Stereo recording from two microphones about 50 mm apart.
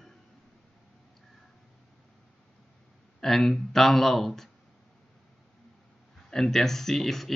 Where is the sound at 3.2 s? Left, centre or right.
Centre.